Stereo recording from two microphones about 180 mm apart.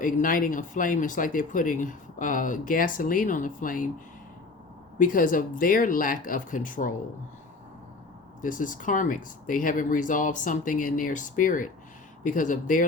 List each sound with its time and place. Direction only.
0.0 s speech: 50° left (ahead or behind)
4.9 s speech: 50° left (ahead or behind)
8.4 s speech: 45° left (ahead or behind)